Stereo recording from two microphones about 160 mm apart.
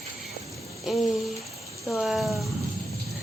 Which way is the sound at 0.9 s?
5° right (ahead or behind).